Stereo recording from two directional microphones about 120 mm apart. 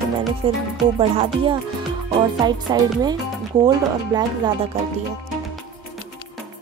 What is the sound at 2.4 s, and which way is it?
Music, 35° right (ahead or behind).